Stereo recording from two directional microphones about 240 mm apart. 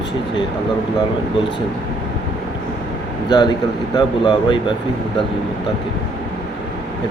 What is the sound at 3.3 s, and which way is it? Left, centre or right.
Speech, centre.